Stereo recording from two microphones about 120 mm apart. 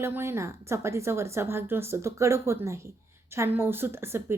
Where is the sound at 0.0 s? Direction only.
20° right (ahead or behind).